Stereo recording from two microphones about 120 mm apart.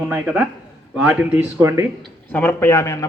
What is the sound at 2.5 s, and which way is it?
Speech, 25° left (ahead or behind).